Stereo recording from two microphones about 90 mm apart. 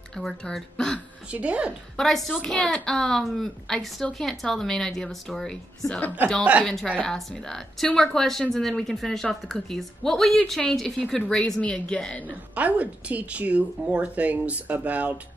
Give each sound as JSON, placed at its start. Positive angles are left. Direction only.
{"t": 0.1, "sound": "a woman's voice", "side_deg": 5}
{"t": 1.3, "sound": "speech", "side_deg": -15}
{"t": 2.0, "sound": "a woman's voice", "side_deg": 5}
{"t": 6.6, "sound": "a woman's voice", "side_deg": 5}
{"t": 12.5, "sound": "speech", "side_deg": -15}